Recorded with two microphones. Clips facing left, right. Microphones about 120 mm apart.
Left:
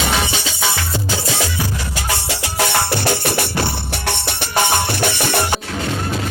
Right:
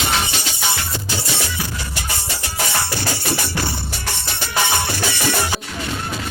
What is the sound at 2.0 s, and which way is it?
Music, 90° left.